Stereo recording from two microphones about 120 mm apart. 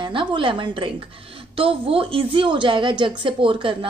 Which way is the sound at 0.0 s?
40° right (ahead or behind).